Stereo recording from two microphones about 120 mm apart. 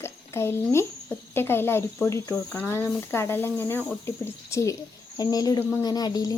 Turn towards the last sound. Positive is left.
turn(degrees=30)  # may be behind; listen again after turning